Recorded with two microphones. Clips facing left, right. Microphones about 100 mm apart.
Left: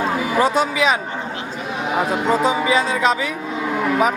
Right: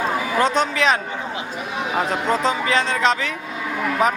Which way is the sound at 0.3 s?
10° left (ahead or behind).